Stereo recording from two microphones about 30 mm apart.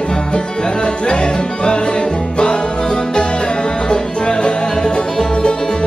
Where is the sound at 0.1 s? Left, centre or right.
Left.